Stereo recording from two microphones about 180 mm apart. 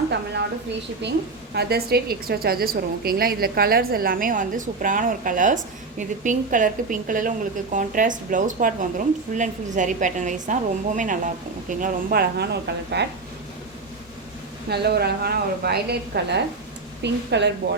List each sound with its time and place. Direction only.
1.5 s a woman's voice: 60° right (ahead or behind)
14.7 s a woman's voice: 65° right (ahead or behind)